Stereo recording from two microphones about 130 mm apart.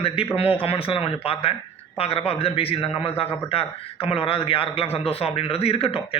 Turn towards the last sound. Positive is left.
turn(degrees=45)  # may be behind; listen again after turning